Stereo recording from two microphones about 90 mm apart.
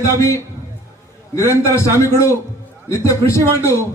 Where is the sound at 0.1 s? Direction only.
35° left (ahead or behind).